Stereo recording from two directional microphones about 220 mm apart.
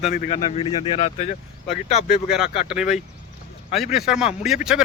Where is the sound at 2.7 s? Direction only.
5° right (ahead or behind).